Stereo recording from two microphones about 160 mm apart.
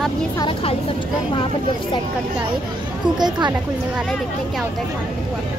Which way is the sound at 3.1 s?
25° right (ahead or behind).